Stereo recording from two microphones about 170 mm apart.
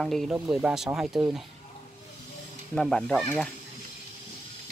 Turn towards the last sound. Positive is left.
turn(degrees=5)  # may be behind; listen again after turning